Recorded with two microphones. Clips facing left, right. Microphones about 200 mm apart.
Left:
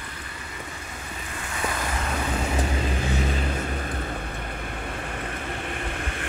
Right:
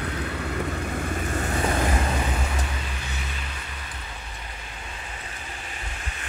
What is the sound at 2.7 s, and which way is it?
Vehicle, 45° left (ahead or behind).